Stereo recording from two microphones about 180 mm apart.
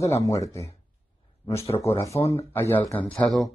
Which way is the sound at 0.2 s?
15° left (ahead or behind).